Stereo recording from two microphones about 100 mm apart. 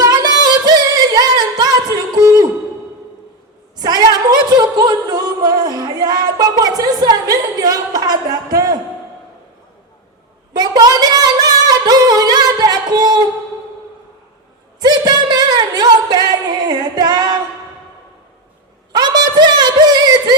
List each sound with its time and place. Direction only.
0.0 s singing: 45° right (ahead or behind)
3.8 s music: 40° right (ahead or behind)
10.5 s singing: 40° right (ahead or behind)
14.8 s a sound: 45° right (ahead or behind)
16.6 s female singing: 45° right (ahead or behind)
18.9 s a sound: 45° right (ahead or behind)